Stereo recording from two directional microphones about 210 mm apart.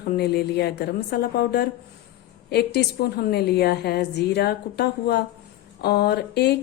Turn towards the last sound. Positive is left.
turn(degrees=50)  # may be behind; listen again after turning